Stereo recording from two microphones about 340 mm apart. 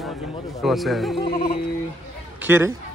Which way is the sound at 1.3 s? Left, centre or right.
Left.